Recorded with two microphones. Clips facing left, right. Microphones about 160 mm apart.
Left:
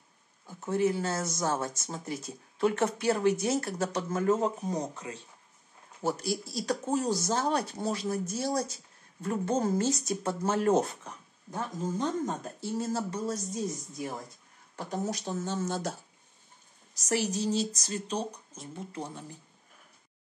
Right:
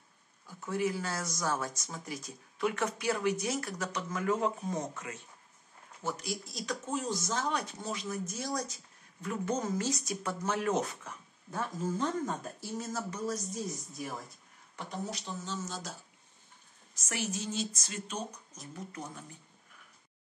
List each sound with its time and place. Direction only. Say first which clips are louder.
0.5 s speech: left 5 dB; 25° left (ahead or behind)
11.5 s speech: left 1 dB; 20° left (ahead or behind)
12.7 s speech: left 6 dB; 30° left (ahead or behind)
14.8 s speech: left 6 dB; 40° left (ahead or behind); by 16.0 s 60° left (ahead or behind)
16.9 s speech: left 7 dB; 35° left (ahead or behind)